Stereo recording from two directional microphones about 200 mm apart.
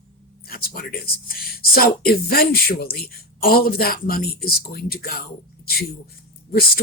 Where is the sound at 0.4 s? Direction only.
50° left (ahead or behind).